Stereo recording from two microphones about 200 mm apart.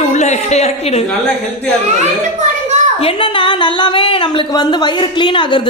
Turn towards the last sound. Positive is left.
turn(degrees=25)  # may be behind; listen again after turning